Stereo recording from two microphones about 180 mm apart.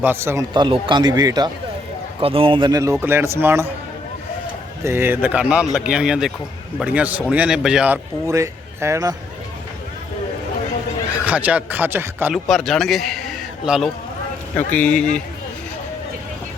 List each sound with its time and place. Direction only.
0.0 s a man's voice: 10° right (ahead or behind)
0.5 s a man's voice: 25° right (ahead or behind)
4.8 s a man's voice: 15° right (ahead or behind)
8.3 s speech: 15° right (ahead or behind)
11.1 s a man's voice: 10° right (ahead or behind)
12.5 s a man's voice: centre (ahead or behind)